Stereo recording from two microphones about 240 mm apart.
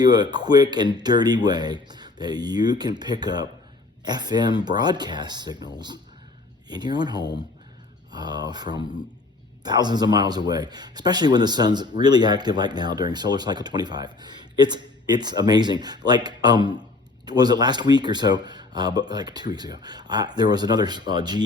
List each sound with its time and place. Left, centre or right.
0.0 s speech: centre
6.7 s speech: centre